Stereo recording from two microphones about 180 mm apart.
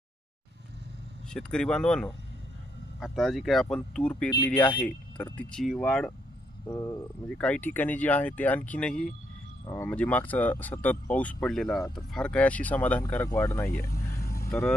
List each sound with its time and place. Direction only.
1.3 s speech: 5° left (ahead or behind)
6.7 s speech: 15° left (ahead or behind)
7.3 s speech: 5° left (ahead or behind)
13.7 s vehicle: 55° left (ahead or behind)
14.5 s speech: 5° left (ahead or behind)